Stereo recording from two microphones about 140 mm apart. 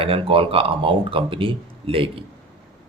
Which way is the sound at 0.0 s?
40° right (ahead or behind).